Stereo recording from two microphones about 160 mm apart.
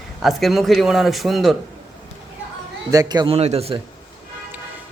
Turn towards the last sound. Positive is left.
turn(degrees=-40)  # may be behind; listen again after turning